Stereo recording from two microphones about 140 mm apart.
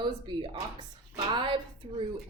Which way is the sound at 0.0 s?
35° right (ahead or behind).